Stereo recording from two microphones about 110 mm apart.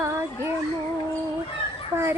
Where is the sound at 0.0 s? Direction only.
25° right (ahead or behind).